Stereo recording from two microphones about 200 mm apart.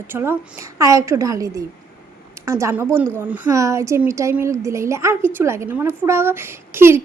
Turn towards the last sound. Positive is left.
turn(degrees=-10)  # may be behind; listen again after turning